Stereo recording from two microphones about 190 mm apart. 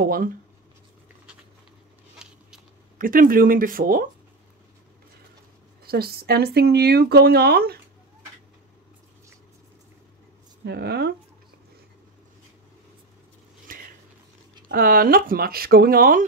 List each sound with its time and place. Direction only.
0.0 s speech: 50° right (ahead or behind)
2.2 s a sound: 5° right (ahead or behind)
3.0 s speech: 45° right (ahead or behind)
5.9 s speech: 55° right (ahead or behind)
10.6 s speech: 60° right (ahead or behind)
13.7 s a sound: 45° right (ahead or behind)
14.7 s speech: 50° right (ahead or behind)